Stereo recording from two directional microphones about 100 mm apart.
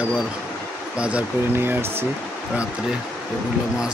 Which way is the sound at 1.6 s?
25° right (ahead or behind).